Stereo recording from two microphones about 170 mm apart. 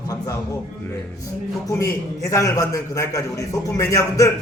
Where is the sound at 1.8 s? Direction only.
15° left (ahead or behind).